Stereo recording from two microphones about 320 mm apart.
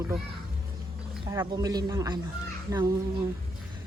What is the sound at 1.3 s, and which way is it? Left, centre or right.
Speech, centre.